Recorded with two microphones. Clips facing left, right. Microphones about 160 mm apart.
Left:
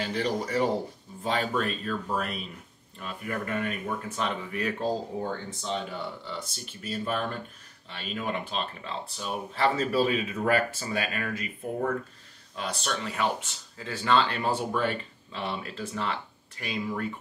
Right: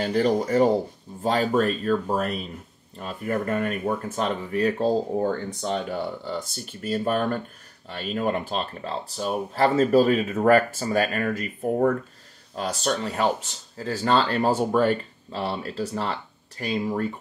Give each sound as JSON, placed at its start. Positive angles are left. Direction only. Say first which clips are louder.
{"t": 0.0, "sound": "speech", "louder": "right 7 dB", "side_deg": -40}
{"t": 5.6, "sound": "speech", "louder": "right 6 dB", "side_deg": -50}